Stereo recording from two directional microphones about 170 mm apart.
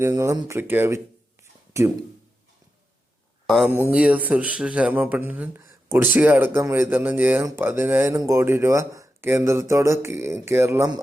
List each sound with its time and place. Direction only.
0.0 s speech: 20° right (ahead or behind)
3.5 s speech: 5° right (ahead or behind)